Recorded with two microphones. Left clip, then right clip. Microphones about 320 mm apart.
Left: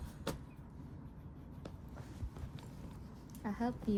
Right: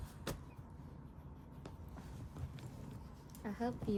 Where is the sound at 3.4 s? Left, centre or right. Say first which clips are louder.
Left 2 dB; centre.